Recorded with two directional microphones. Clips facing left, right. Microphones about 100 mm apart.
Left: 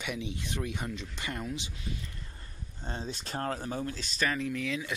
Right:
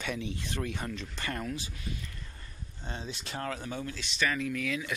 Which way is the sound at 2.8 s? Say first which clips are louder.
Left 2 dB; 40° left (ahead or behind).